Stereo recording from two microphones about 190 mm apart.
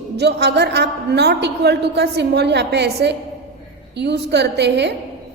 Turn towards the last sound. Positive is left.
turn(degrees=-65)  # may be behind; listen again after turning